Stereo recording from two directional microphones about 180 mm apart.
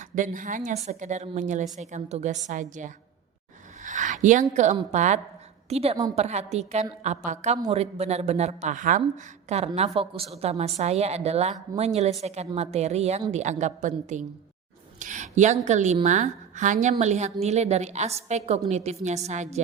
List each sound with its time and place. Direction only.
0.0 s a woman's voice: 45° right (ahead or behind)
3.8 s rub: 45° right (ahead or behind)
5.6 s a woman's voice: 35° right (ahead or behind)
14.9 s a sound: 45° right (ahead or behind)
15.6 s a woman's voice: 40° right (ahead or behind)